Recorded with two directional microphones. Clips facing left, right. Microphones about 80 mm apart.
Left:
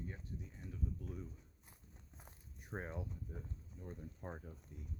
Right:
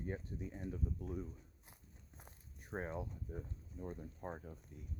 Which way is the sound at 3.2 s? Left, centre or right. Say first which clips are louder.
Right 3 dB; centre.